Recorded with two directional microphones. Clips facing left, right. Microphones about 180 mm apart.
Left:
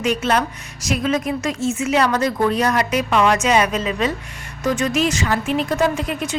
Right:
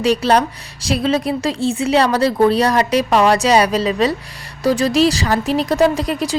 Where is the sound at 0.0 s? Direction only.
35° right (ahead or behind).